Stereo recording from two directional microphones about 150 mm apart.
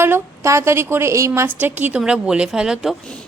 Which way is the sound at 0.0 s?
20° right (ahead or behind).